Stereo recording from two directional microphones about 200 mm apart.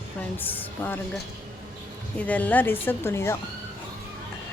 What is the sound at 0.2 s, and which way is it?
Speech, 10° left (ahead or behind).